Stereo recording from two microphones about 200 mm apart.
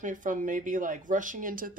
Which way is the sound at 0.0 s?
40° right (ahead or behind).